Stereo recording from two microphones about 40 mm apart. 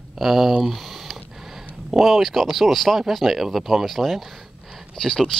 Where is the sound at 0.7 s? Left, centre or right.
Centre.